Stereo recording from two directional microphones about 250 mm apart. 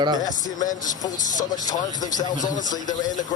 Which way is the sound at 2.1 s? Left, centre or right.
Left.